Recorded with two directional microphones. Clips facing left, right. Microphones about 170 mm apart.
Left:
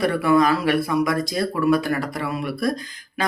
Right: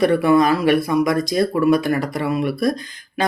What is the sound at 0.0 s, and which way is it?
Speech, 20° right (ahead or behind).